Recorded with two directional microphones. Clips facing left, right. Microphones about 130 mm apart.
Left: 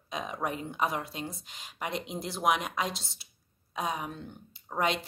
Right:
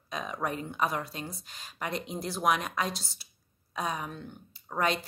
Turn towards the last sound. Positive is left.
turn(degrees=20)  # may be behind; listen again after turning